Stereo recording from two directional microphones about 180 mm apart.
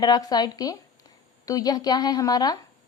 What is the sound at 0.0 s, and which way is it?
Speech, 20° left (ahead or behind).